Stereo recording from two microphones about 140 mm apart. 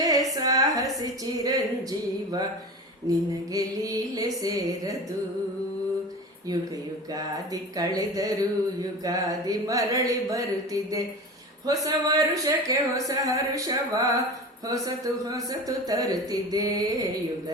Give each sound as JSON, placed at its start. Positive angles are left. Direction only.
{"t": 0.0, "sound": "a sound", "side_deg": -25}
{"t": 3.1, "sound": "speech", "side_deg": -25}
{"t": 7.1, "sound": "speech", "side_deg": -25}